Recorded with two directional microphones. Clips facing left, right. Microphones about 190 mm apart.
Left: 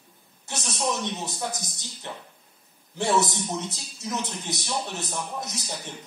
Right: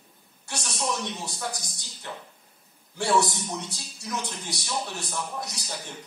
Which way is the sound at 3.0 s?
20° left (ahead or behind).